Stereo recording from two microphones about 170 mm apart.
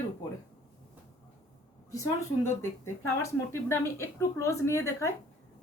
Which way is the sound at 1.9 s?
15° left (ahead or behind).